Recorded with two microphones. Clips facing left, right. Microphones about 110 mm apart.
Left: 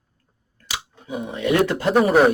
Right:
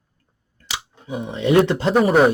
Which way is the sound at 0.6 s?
25° right (ahead or behind).